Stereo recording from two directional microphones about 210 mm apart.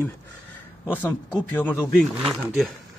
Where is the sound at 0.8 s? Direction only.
10° left (ahead or behind).